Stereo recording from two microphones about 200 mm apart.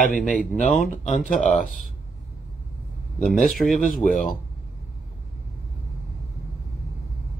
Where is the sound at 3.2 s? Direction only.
Centre (ahead or behind).